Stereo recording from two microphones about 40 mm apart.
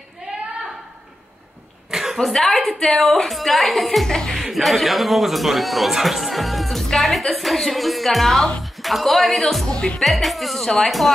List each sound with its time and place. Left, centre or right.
1.9 s a sound: centre
2.4 s a man's voice: centre
4.4 s a man's voice: centre
9.7 s music: left
10.0 s a man's voice: centre